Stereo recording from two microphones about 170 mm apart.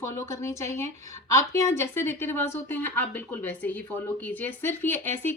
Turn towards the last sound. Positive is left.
turn(degrees=10)  # may be behind; listen again after turning